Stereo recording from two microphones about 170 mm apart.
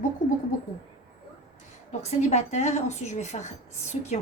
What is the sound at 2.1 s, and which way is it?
A woman's voice, 40° left (ahead or behind).